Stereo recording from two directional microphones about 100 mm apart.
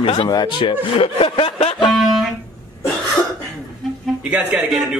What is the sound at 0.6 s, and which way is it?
Speech, 60° left (ahead or behind).